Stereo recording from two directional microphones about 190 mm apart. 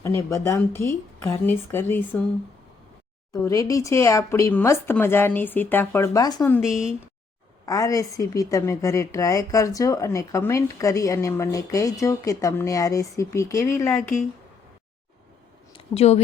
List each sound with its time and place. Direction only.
0.0 s speech: 15° left (ahead or behind)
3.4 s speech: 15° left (ahead or behind)
6.5 s speech: centre (ahead or behind)
7.6 s speech: 20° left (ahead or behind)
15.7 s a sound: 30° left (ahead or behind)